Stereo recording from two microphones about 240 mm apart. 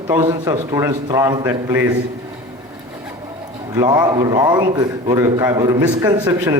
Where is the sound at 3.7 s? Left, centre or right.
Centre.